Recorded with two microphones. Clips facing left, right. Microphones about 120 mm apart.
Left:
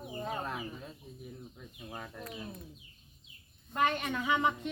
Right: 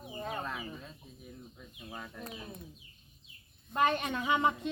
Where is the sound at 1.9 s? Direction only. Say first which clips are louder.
Left 1 dB; 10° left (ahead or behind).